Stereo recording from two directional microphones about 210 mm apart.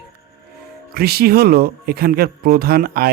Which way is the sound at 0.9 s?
50° right (ahead or behind).